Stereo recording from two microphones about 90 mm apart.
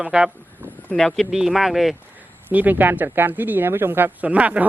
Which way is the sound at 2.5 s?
20° right (ahead or behind).